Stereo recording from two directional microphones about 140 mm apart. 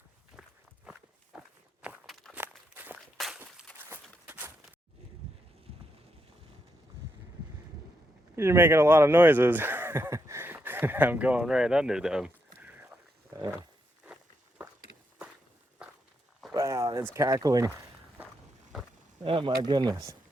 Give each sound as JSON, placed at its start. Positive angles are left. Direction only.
{"t": 1.3, "sound": "walk", "side_deg": -5}
{"t": 2.4, "sound": "walk", "side_deg": -10}
{"t": 3.2, "sound": "walk", "side_deg": 0}
{"t": 3.8, "sound": "walk", "side_deg": -15}
{"t": 4.3, "sound": "a sound", "side_deg": -15}
{"t": 8.4, "sound": "speech", "side_deg": -15}
{"t": 15.8, "sound": "walk", "side_deg": -5}
{"t": 16.6, "sound": "speech", "side_deg": -25}
{"t": 19.2, "sound": "speech", "side_deg": -35}